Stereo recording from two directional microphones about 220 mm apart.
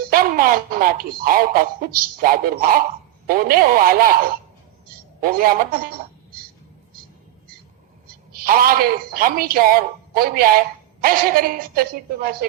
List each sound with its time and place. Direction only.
0.1 s speech: 40° right (ahead or behind)
5.2 s speech: 40° right (ahead or behind)
8.0 s a woman's voice: 40° right (ahead or behind)